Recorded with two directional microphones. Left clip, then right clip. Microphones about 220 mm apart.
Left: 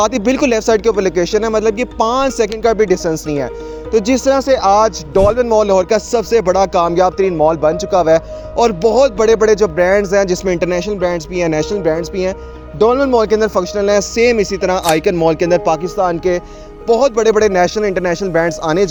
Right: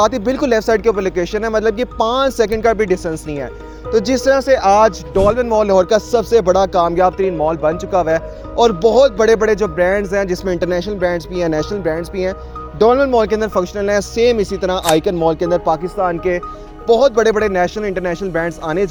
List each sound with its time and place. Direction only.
0.0 s speech: 40° left (ahead or behind)
3.9 s speech: 30° left (ahead or behind)